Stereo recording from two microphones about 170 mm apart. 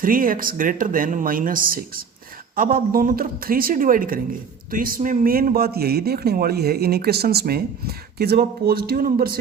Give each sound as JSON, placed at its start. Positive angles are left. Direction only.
{"t": 0.0, "sound": "speech", "side_deg": -55}